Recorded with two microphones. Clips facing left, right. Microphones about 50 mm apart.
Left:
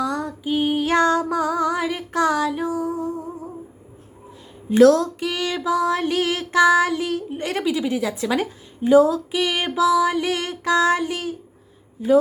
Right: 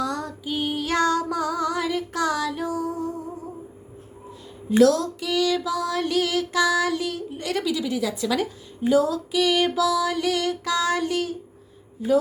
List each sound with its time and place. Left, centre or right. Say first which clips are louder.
0.0 s music: left 3 dB; centre
4.8 s music: left 4 dB; left